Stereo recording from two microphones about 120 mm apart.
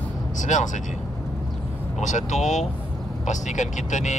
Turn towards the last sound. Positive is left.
turn(degrees=85)